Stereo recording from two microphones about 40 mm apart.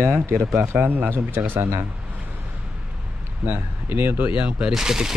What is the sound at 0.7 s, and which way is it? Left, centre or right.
Speech, right.